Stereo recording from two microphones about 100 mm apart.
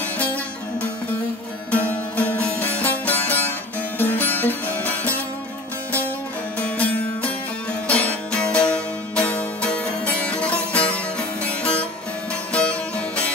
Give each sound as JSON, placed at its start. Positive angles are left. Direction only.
{"t": 1.7, "sound": "music", "side_deg": 15}
{"t": 6.6, "sound": "music", "side_deg": 15}